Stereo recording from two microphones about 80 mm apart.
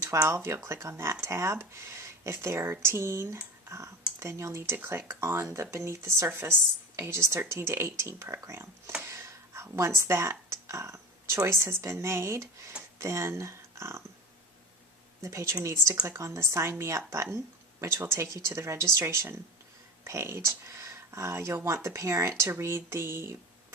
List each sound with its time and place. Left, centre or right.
0.0 s speech: right
15.2 s speech: right